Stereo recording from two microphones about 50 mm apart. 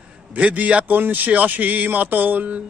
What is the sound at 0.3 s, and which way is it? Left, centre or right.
A man's voice, right.